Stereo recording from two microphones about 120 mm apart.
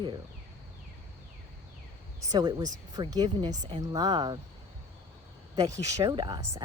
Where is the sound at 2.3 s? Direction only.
35° right (ahead or behind).